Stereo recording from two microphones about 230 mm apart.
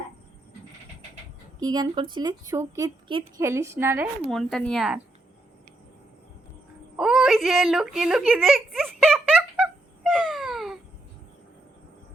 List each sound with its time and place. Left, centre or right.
1.5 s speech: centre
4.3 s speech: centre
6.9 s whimper: centre